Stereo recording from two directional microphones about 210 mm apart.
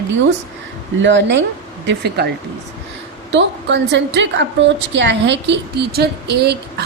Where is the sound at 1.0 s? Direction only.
60° right (ahead or behind).